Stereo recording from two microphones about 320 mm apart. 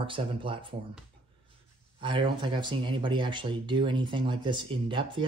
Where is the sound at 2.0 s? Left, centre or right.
Centre.